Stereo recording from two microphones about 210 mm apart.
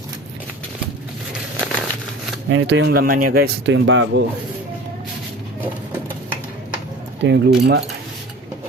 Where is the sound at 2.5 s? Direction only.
65° right (ahead or behind).